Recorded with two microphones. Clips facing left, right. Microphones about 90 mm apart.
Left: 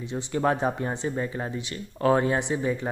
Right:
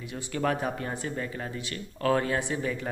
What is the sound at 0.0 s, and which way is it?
A man's voice, 25° left (ahead or behind).